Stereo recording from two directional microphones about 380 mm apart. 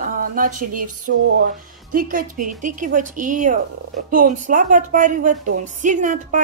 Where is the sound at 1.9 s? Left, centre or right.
Right.